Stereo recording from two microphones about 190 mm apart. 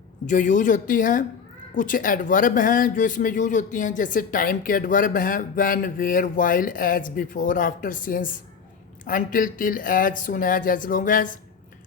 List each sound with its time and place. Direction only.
0.3 s speech: 40° left (ahead or behind)